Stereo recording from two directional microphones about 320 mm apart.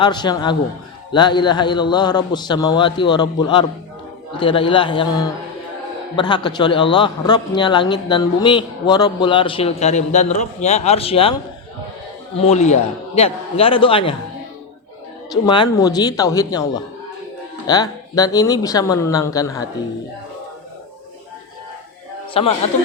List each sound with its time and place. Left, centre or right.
0.0 s a man's voice: centre
12.4 s a man's voice: left
15.4 s a man's voice: centre
22.3 s a man's voice: centre